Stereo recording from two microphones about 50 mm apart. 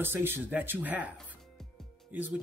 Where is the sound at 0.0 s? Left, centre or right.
Right.